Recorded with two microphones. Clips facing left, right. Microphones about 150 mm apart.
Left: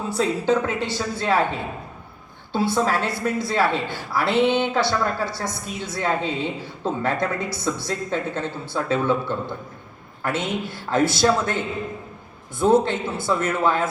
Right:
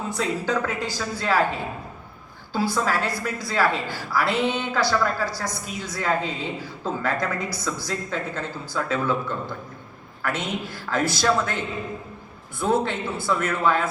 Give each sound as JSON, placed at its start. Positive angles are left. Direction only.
{"t": 0.1, "sound": "a woman's voice", "side_deg": 25}
{"t": 2.5, "sound": "a woman's voice", "side_deg": 25}